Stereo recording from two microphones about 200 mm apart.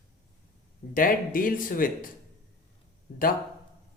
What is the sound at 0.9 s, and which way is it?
Speech, 45° left (ahead or behind).